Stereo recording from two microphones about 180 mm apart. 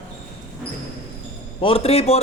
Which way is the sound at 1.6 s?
30° left (ahead or behind).